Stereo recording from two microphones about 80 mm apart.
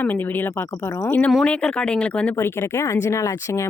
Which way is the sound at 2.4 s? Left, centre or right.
Left.